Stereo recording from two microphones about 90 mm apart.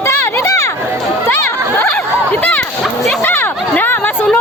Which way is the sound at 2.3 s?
15° left (ahead or behind).